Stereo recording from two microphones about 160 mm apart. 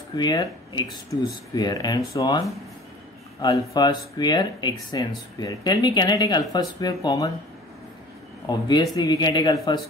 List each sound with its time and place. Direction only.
0.1 s speech: 25° left (ahead or behind)
8.5 s speech: 25° left (ahead or behind)